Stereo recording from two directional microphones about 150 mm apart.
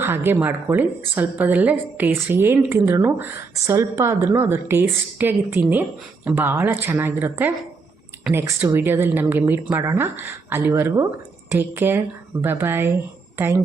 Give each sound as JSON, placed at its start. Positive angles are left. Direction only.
{"t": 0.0, "sound": "speech", "side_deg": -15}